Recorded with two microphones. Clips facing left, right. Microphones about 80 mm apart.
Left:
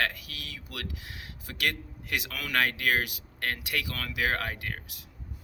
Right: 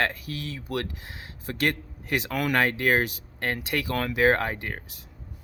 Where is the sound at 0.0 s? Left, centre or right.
Right.